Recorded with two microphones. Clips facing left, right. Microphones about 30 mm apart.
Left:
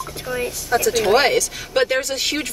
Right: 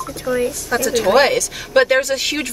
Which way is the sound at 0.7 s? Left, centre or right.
Centre.